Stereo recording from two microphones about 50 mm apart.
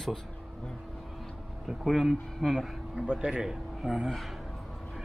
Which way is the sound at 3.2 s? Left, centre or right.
Centre.